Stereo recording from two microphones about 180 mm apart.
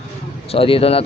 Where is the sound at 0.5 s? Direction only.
30° left (ahead or behind).